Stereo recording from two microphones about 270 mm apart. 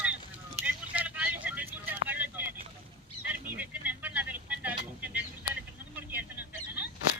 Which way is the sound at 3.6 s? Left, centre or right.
Centre.